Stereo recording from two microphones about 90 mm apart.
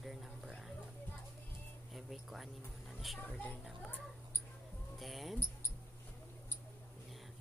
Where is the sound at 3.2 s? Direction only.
15° left (ahead or behind).